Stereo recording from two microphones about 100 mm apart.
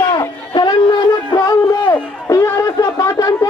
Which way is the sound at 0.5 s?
50° left (ahead or behind).